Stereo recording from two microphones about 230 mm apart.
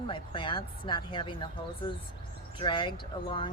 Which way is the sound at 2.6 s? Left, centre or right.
Left.